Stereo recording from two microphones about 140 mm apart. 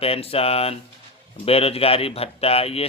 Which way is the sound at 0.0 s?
45° left (ahead or behind).